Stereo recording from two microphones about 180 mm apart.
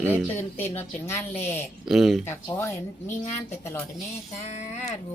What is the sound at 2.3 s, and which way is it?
Speech, 15° left (ahead or behind).